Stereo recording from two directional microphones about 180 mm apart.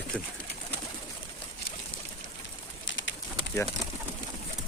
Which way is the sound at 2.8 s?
90° left.